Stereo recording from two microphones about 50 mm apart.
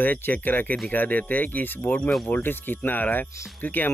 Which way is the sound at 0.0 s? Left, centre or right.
Left.